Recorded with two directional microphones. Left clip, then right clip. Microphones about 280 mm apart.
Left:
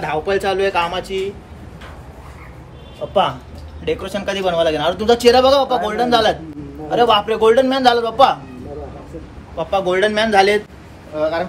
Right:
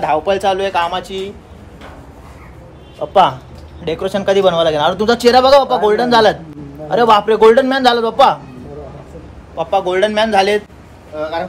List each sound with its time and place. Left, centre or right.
0.0 s a man's voice: centre
3.1 s a man's voice: right
9.6 s speech: centre